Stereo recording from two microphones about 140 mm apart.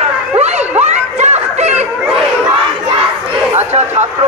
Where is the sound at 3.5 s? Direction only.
50° right (ahead or behind).